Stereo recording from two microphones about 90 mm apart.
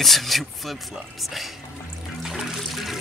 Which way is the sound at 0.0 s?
Centre (ahead or behind).